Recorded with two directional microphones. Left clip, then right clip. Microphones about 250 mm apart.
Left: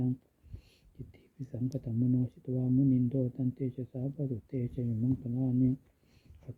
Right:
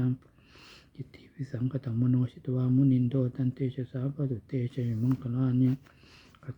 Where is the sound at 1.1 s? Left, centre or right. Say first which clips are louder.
Right 4 dB; centre.